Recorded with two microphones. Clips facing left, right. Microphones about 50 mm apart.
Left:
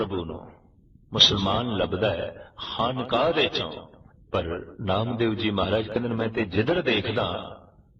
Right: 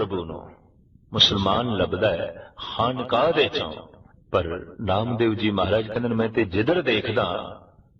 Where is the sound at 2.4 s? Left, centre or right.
Centre.